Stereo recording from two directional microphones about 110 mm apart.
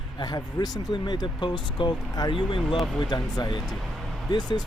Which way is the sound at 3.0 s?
35° left (ahead or behind).